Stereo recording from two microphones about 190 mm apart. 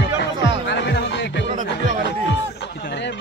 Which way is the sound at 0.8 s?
65° left (ahead or behind).